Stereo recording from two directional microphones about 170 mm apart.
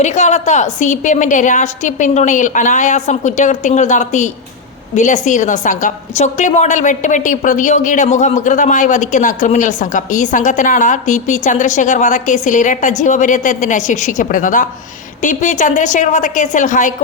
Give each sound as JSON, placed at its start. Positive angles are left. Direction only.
{"t": 0.0, "sound": "a woman's voice", "side_deg": 45}